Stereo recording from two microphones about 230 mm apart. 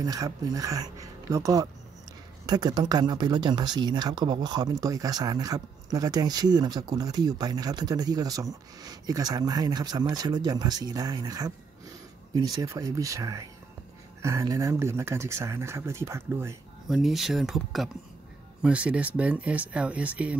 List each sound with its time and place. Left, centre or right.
0.0 s speech: centre
12.6 s speech: centre